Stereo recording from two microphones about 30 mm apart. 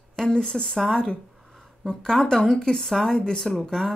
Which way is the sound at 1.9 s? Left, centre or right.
Left.